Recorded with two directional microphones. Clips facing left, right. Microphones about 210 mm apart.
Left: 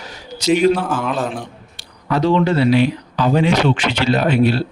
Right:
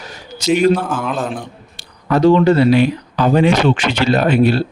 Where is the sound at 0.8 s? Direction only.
Centre (ahead or behind).